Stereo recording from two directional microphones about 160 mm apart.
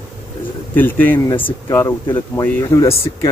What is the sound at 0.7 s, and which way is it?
Speech, 10° left (ahead or behind).